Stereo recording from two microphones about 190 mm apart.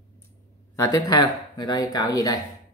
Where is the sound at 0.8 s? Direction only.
20° left (ahead or behind).